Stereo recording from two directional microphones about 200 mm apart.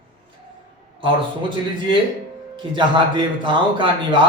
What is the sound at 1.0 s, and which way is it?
Speech, 25° right (ahead or behind).